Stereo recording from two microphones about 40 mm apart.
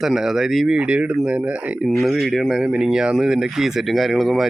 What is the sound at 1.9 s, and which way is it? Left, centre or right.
Speech, centre.